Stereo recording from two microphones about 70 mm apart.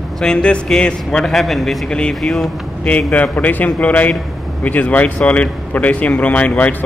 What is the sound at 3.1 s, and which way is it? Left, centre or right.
Speech, left.